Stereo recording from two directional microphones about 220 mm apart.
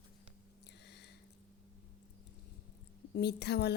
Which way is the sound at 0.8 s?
50° left (ahead or behind).